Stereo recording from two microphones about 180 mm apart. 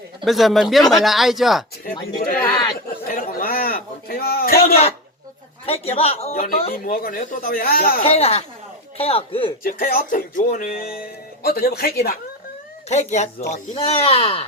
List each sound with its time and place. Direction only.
0.3 s speech: centre (ahead or behind)
2.4 s speech: 25° left (ahead or behind)
3.1 s a sound: 50° left (ahead or behind)
5.6 s speech: 35° left (ahead or behind)
6.3 s speech: 55° left (ahead or behind)
8.0 s speech: 35° left (ahead or behind)
9.6 s speech: 50° left (ahead or behind)
12.9 s speech: 40° left (ahead or behind)